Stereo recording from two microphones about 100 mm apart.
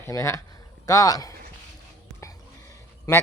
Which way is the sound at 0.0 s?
30° left (ahead or behind).